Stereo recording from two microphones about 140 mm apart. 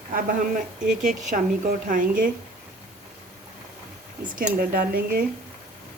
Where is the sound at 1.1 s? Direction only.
70° right (ahead or behind).